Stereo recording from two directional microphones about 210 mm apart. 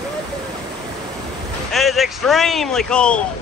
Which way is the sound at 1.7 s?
Centre (ahead or behind).